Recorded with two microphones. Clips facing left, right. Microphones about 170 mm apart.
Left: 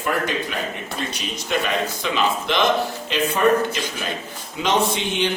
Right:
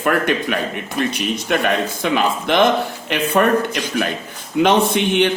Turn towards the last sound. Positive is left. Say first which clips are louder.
# right 5 dB
turn(degrees=-60)  # may be behind; listen again after turning